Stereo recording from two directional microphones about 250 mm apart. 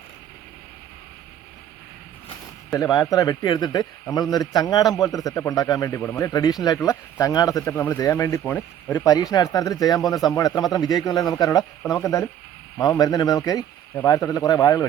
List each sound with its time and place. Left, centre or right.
2.7 s speech: centre